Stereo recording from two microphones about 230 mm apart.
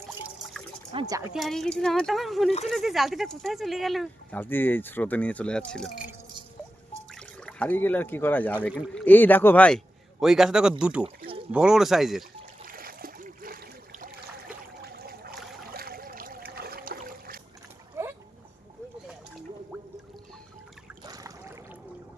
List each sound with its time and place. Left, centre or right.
0.9 s speech: centre
1.3 s speech: centre
7.1 s speech: centre
8.6 s speech: centre
9.0 s speech: centre
12.6 s splash: right
14.8 s a sound: right
16.6 s trickle: right
18.0 s boat: centre
21.0 s a sound: centre